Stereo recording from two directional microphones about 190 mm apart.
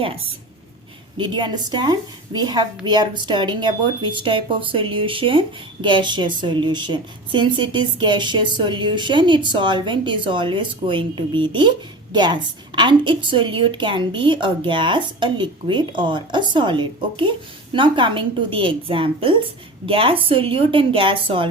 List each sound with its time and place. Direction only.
1.2 s a woman's voice: 25° right (ahead or behind)